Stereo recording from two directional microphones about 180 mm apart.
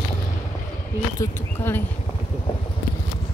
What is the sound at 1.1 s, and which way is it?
Speech, 10° left (ahead or behind).